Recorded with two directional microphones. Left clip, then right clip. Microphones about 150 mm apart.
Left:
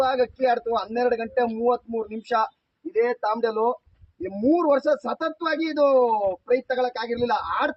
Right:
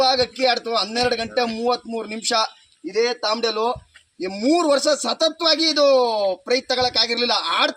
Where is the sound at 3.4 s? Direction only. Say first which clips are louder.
Right 1 dB; 5° right (ahead or behind).